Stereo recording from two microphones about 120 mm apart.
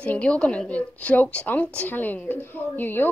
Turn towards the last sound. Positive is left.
turn(degrees=15)  # may be behind; listen again after turning